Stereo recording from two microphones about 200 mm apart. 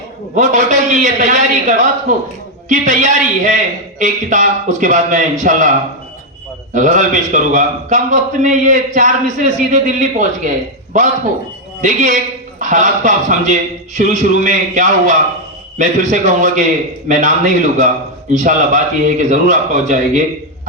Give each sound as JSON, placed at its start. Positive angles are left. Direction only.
{"t": 0.3, "sound": "a man's voice", "side_deg": -40}
{"t": 6.7, "sound": "a man's voice", "side_deg": -40}